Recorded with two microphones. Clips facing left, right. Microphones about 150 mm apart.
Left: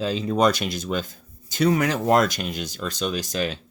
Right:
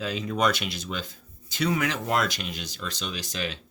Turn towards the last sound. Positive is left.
turn(degrees=45)  # may be behind; listen again after turning